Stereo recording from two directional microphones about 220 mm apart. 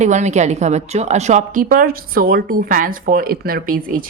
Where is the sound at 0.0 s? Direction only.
30° right (ahead or behind).